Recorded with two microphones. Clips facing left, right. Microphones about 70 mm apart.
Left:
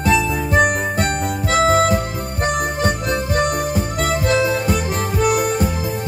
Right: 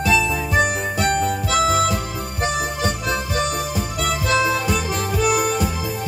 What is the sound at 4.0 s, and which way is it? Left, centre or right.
Music, left.